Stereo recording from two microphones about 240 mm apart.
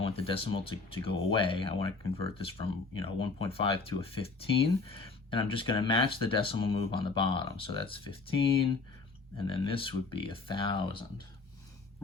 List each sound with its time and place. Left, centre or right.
0.0 s speech: left